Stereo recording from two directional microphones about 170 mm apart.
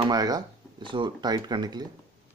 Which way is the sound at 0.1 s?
25° right (ahead or behind).